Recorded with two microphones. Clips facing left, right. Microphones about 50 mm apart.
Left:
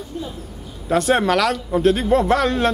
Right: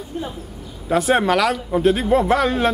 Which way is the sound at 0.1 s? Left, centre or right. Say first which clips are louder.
Right 2 dB; right.